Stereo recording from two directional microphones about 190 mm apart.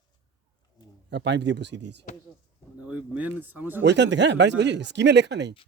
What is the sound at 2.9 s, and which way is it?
Speech, 10° right (ahead or behind).